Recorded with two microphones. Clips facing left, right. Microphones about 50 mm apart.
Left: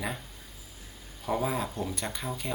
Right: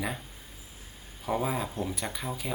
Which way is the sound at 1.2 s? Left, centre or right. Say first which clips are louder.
Even; centre.